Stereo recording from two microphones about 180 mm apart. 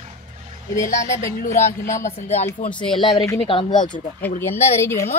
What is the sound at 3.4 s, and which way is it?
Speech, 30° left (ahead or behind).